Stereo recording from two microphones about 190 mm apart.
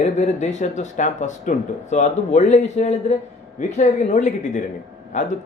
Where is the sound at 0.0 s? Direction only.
35° left (ahead or behind).